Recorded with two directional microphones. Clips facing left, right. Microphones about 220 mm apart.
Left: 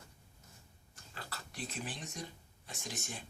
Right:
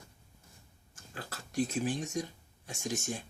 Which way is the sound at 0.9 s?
45° right (ahead or behind).